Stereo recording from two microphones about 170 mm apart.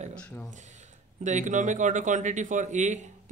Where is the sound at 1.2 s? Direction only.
45° right (ahead or behind).